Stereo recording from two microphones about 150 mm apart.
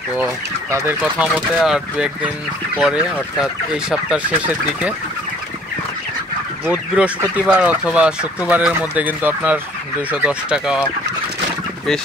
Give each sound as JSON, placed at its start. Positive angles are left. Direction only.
{"t": 0.7, "sound": "speech", "side_deg": -20}
{"t": 1.0, "sound": "speech", "side_deg": -10}
{"t": 6.6, "sound": "speech", "side_deg": -10}